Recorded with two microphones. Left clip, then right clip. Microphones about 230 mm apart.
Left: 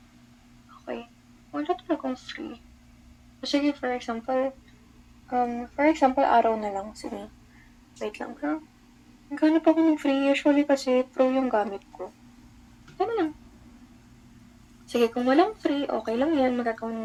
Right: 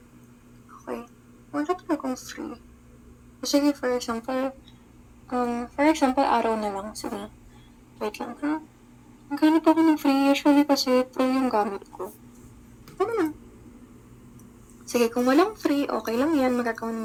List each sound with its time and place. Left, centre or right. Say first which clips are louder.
1.5 s speech: right 1 dB; right
3.4 s a sound: right 3 dB; right
14.9 s speech: right 1 dB; right